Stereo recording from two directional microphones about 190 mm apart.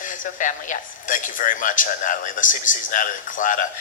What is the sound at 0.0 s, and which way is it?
Speech, 45° left (ahead or behind).